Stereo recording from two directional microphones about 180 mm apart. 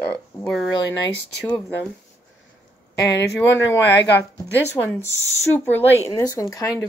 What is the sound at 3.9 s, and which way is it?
Speech, 75° left (ahead or behind).